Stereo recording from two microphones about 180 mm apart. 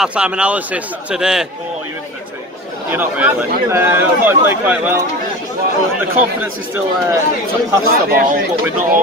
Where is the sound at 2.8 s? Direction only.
10° right (ahead or behind).